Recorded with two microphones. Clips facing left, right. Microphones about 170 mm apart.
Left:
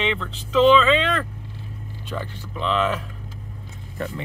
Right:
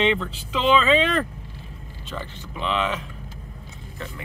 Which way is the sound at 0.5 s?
Centre (ahead or behind).